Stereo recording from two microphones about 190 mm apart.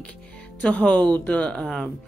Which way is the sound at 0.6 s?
5° left (ahead or behind).